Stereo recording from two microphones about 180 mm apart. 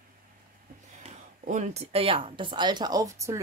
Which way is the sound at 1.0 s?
40° right (ahead or behind).